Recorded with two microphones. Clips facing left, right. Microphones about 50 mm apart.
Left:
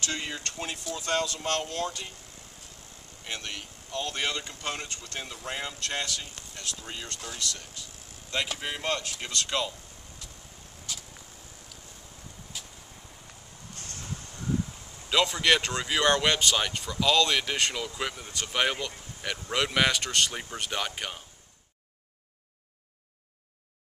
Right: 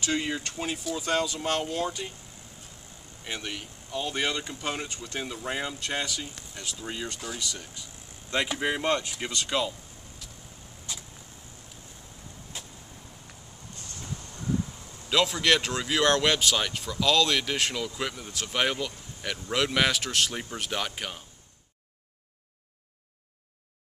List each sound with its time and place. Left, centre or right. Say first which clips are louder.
0.0 s speech: right 5 dB; centre
3.3 s speech: right 2 dB; centre
8.3 s speech: right 4 dB; centre
10.2 s vehicle: even; centre
13.7 s a sound: left 1 dB; left
15.0 s speech: even; centre